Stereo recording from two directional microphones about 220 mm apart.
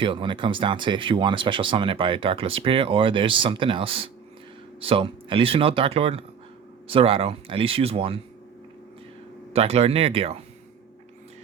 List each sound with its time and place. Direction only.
0.0 s speech: 20° right (ahead or behind)
9.5 s speech: 25° right (ahead or behind)